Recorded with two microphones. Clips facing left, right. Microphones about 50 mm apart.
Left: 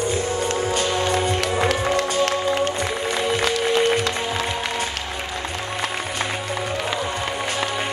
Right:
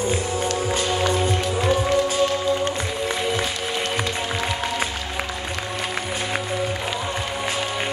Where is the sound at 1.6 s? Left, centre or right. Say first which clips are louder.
Right 5 dB; left.